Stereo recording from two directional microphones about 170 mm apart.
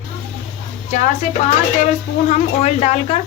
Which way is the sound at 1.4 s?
45° left (ahead or behind).